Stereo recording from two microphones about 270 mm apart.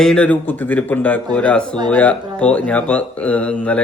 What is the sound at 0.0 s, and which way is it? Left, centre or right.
A man's voice, centre.